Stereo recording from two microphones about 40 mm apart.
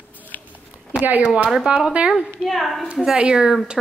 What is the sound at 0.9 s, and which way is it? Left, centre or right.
Speech, right.